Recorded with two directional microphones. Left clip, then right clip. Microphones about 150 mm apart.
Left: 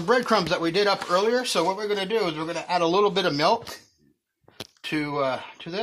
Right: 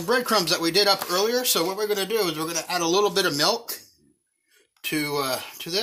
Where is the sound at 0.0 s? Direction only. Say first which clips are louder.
Left 1 dB; 45° left (ahead or behind).